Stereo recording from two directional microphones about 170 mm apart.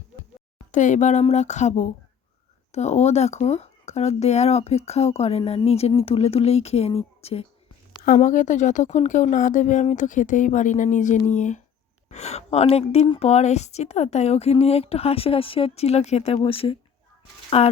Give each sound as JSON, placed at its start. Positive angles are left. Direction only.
{"t": 0.7, "sound": "a woman's voice", "side_deg": 45}
{"t": 8.0, "sound": "a woman's voice", "side_deg": 50}